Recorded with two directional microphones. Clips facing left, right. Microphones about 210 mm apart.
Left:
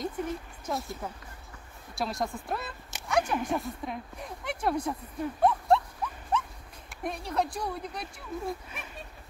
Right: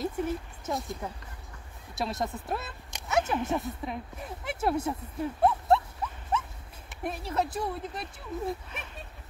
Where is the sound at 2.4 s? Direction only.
Centre (ahead or behind).